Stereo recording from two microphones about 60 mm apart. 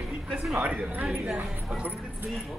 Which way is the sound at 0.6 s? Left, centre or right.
Centre.